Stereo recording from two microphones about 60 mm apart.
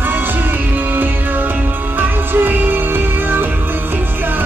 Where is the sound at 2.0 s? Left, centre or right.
Right.